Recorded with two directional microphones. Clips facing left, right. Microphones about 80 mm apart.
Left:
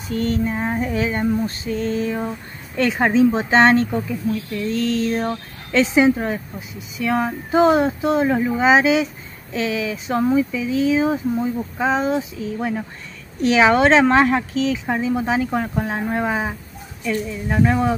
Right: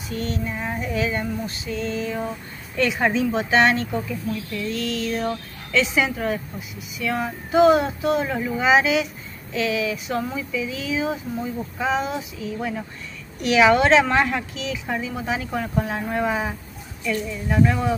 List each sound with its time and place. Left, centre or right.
0.1 s female singing: left
7.0 s speech: left
11.8 s female singing: left
13.4 s speech: left